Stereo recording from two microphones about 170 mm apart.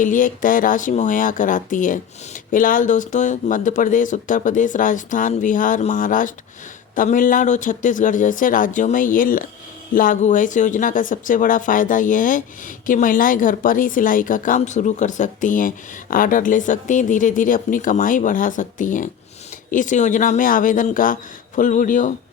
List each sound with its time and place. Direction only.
0.0 s speech: 50° left (ahead or behind)